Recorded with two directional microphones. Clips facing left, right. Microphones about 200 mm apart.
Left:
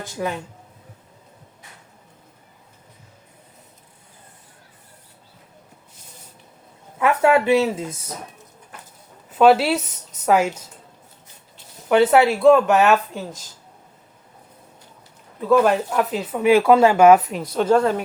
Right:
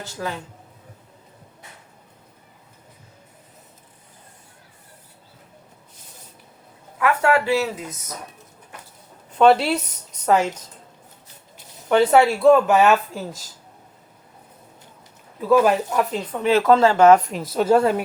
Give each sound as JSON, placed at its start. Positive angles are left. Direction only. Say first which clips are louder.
{"t": 0.0, "sound": "speech", "louder": "left 3 dB", "side_deg": 15}
{"t": 7.0, "sound": "speech", "louder": "left 2 dB", "side_deg": 20}
{"t": 9.3, "sound": "speech", "louder": "left 1 dB", "side_deg": 5}
{"t": 11.9, "sound": "speech", "louder": "left 1 dB", "side_deg": 0}
{"t": 15.4, "sound": "speech", "louder": "even", "side_deg": -5}